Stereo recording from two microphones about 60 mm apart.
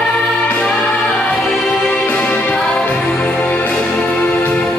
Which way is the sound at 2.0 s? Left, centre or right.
Left.